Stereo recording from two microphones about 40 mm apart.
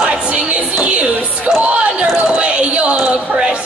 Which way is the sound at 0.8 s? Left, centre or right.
Right.